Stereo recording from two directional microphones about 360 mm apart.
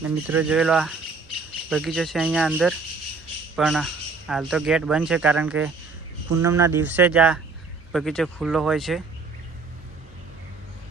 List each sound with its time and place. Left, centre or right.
0.0 s speech: centre